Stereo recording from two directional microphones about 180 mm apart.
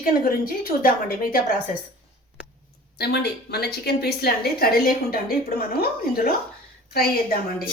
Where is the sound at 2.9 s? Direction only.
60° left (ahead or behind).